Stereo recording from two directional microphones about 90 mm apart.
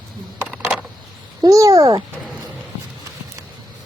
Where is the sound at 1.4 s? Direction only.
40° right (ahead or behind).